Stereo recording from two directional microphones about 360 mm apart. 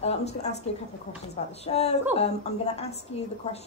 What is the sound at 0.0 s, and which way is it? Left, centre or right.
A woman's voice, centre.